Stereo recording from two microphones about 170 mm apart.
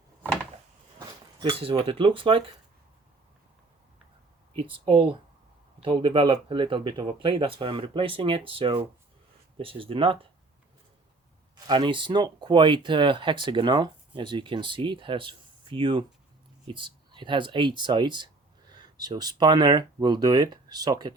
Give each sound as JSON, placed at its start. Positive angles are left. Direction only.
{"t": 0.9, "sound": "speech", "side_deg": -30}
{"t": 4.5, "sound": "speech", "side_deg": -30}
{"t": 11.6, "sound": "speech", "side_deg": -25}